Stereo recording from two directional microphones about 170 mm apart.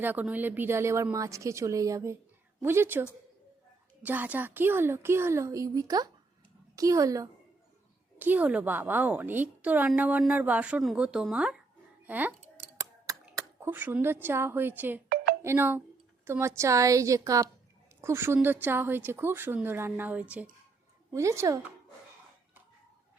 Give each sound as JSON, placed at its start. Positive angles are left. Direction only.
{"t": 0.0, "sound": "a woman's voice", "side_deg": -10}
{"t": 12.7, "sound": "a sound", "side_deg": -20}
{"t": 15.4, "sound": "a woman's voice", "side_deg": -15}